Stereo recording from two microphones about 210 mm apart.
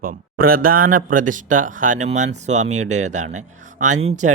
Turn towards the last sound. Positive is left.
turn(degrees=-35)  # may be behind; listen again after turning